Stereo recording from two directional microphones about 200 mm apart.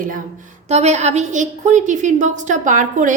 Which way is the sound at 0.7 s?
35° right (ahead or behind).